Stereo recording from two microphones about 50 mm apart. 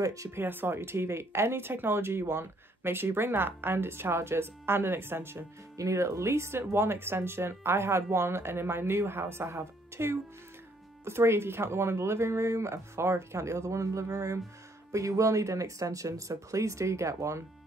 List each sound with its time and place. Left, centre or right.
0.0 s speech: right
0.4 s speech: right
5.8 s speech: right